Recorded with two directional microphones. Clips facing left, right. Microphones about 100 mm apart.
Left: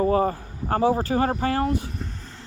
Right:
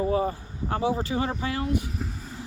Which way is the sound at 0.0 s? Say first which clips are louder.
Left 4 dB; 50° left (ahead or behind).